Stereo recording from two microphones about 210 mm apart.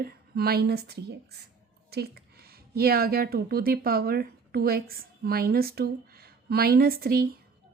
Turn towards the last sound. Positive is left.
turn(degrees=-45)  # may be behind; listen again after turning